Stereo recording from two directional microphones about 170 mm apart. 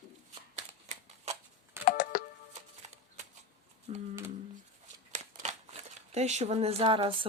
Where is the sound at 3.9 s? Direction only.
40° right (ahead or behind).